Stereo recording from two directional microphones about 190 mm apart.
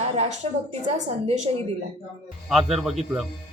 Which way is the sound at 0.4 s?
35° right (ahead or behind).